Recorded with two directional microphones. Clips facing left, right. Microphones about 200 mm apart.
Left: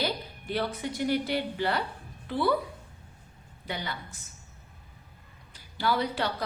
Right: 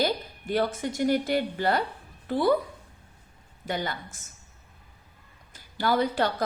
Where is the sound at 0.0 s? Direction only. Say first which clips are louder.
Right 5 dB; 45° right (ahead or behind).